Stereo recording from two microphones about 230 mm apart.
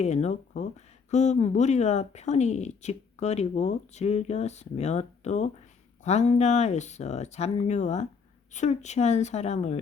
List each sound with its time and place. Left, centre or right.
0.0 s speech: left